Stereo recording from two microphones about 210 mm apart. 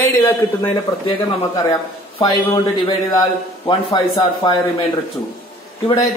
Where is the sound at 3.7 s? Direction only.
20° left (ahead or behind).